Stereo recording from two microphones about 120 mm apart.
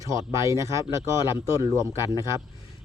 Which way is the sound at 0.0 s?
25° right (ahead or behind).